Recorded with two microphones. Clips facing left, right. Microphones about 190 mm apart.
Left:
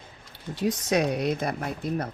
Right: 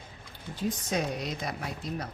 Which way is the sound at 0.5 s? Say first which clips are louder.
Left 6 dB; 75° left (ahead or behind).